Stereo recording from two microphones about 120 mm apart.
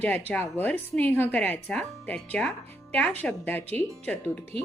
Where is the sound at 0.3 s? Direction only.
15° left (ahead or behind).